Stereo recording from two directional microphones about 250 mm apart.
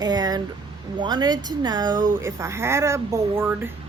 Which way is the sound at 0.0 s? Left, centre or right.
Centre.